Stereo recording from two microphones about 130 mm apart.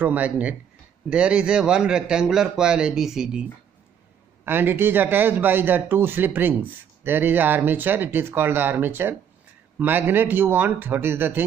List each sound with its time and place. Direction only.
0.0 s a man's voice: 10° right (ahead or behind)
4.5 s a man's voice: 15° right (ahead or behind)